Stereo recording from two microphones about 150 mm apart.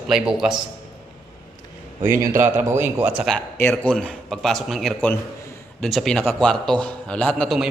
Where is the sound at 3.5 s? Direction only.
10° left (ahead or behind).